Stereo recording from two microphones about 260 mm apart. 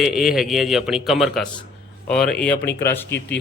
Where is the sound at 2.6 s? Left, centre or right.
Left.